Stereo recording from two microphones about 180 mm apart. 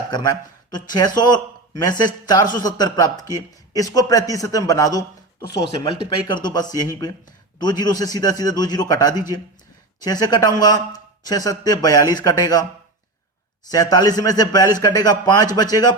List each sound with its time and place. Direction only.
0.1 s a man's voice: 25° left (ahead or behind)
13.7 s a man's voice: 20° left (ahead or behind)